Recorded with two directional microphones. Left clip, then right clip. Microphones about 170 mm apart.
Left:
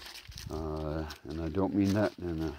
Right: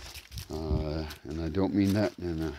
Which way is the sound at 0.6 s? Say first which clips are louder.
Right 2 dB; 5° right (ahead or behind).